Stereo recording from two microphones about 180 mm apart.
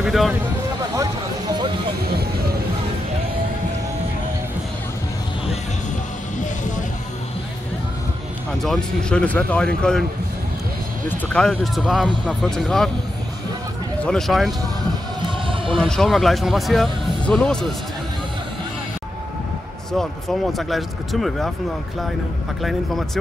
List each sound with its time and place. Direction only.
0.0 s speech: centre (ahead or behind)
8.6 s speech: 5° left (ahead or behind)
11.1 s speech: 5° left (ahead or behind)
14.0 s speech: centre (ahead or behind)
15.2 s music: 30° right (ahead or behind)
15.8 s speech: centre (ahead or behind)
19.9 s speech: centre (ahead or behind)
22.6 s speech: centre (ahead or behind)